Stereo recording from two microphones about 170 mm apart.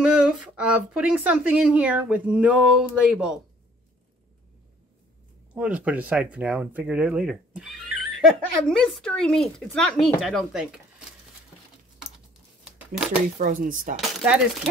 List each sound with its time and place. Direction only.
0.0 s speech: 5° right (ahead or behind)
5.5 s speech: 5° right (ahead or behind)
12.9 s speech: 5° right (ahead or behind)
13.4 s speech: 50° right (ahead or behind)
13.9 s speech: centre (ahead or behind)